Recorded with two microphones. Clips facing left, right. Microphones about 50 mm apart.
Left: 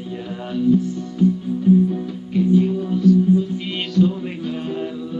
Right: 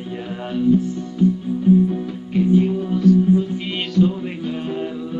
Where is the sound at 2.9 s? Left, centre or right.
Right.